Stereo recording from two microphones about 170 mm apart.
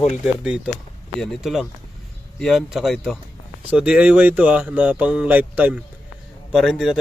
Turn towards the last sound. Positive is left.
turn(degrees=0)  # may be behind; listen again after turning